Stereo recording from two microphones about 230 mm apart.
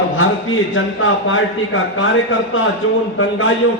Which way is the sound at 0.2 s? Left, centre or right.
Left.